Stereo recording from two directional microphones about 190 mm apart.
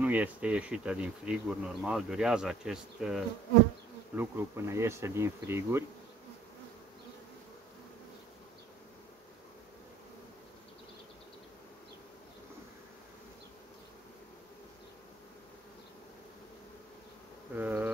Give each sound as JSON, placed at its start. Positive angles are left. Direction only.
{"t": 0.0, "sound": "bee", "side_deg": -10}
{"t": 17.6, "sound": "bee", "side_deg": -10}